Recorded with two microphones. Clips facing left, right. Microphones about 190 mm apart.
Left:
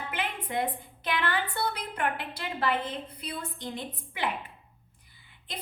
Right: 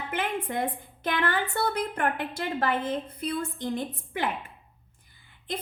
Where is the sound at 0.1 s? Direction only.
50° right (ahead or behind).